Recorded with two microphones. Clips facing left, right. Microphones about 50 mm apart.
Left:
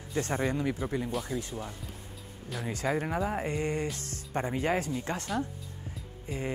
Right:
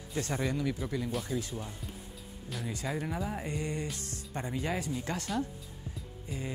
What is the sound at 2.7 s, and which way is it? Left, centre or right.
Speech, left.